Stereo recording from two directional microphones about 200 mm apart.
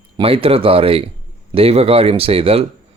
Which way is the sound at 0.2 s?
30° right (ahead or behind).